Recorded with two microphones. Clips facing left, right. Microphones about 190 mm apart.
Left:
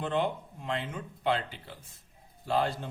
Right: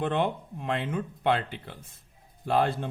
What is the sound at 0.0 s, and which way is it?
Speech, 60° right (ahead or behind).